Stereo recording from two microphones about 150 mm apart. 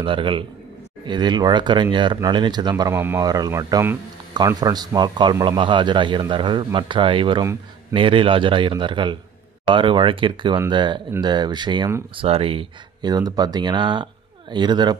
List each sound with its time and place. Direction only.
0.0 s a man's voice: 35° right (ahead or behind)